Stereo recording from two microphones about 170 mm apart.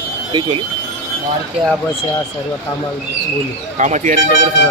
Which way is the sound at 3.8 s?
45° right (ahead or behind).